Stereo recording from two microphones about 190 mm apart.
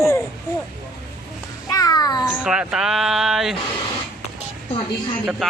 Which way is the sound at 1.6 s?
20° left (ahead or behind).